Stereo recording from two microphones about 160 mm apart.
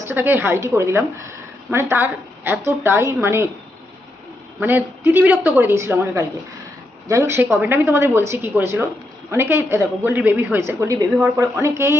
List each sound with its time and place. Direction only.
0.1 s a woman's voice: 15° right (ahead or behind)
4.6 s a woman's voice: 10° right (ahead or behind)